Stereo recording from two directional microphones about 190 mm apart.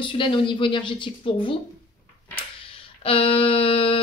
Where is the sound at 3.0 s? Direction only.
30° left (ahead or behind).